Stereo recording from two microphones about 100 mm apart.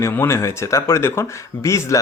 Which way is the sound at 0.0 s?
30° left (ahead or behind).